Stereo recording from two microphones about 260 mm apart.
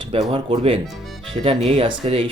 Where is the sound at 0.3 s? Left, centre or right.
Right.